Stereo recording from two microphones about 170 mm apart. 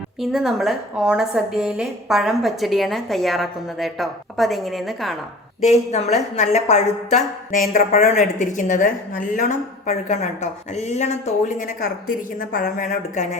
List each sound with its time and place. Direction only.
0.2 s a woman's voice: centre (ahead or behind)
5.6 s a woman's voice: 40° left (ahead or behind)